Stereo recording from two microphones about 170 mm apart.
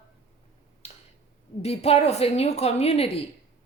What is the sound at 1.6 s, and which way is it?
A woman's voice, 35° left (ahead or behind).